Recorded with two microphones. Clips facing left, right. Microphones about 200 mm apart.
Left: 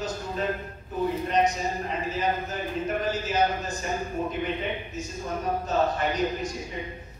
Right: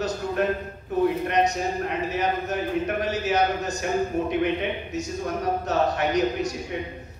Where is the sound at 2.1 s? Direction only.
70° right (ahead or behind).